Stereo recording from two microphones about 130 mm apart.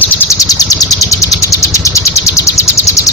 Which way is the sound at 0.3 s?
30° left (ahead or behind).